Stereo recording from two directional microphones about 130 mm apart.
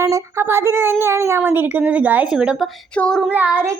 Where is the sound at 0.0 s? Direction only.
20° right (ahead or behind); by 2.6 s 5° right (ahead or behind).